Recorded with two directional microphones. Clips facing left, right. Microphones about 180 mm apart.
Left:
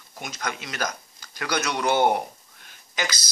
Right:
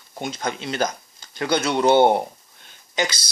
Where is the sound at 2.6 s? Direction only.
25° right (ahead or behind).